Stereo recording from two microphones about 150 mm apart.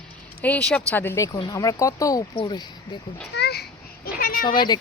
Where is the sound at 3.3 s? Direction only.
90° left; by 4.5 s 70° left (ahead or behind).